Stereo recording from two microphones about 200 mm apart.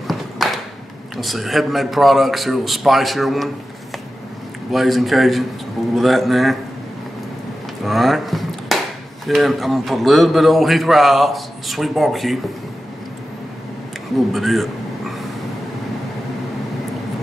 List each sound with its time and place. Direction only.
0.1 s a sound: centre (ahead or behind)
1.1 s a man's voice: centre (ahead or behind)
4.6 s a man's voice: centre (ahead or behind)
7.8 s a sound: centre (ahead or behind)
9.2 s a man's voice: centre (ahead or behind)
14.1 s a man's voice: centre (ahead or behind)